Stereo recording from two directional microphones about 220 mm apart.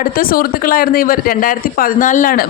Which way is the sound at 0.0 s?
40° left (ahead or behind).